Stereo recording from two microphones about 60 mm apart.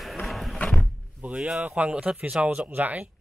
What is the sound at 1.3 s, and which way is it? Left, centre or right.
Speech, centre.